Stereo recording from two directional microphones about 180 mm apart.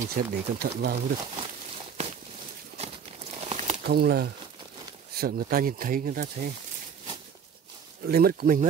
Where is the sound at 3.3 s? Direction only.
40° right (ahead or behind).